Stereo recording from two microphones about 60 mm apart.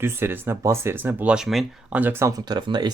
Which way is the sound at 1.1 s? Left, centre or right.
Right.